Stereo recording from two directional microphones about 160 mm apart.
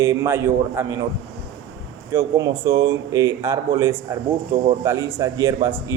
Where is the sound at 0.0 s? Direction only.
20° right (ahead or behind).